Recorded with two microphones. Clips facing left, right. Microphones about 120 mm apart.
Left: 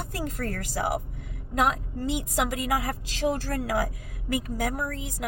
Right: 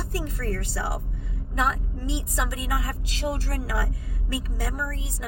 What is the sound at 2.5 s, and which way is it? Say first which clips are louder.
Speech: left 3 dB; 50° left (ahead or behind).